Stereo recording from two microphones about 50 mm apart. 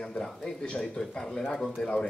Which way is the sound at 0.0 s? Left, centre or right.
Centre.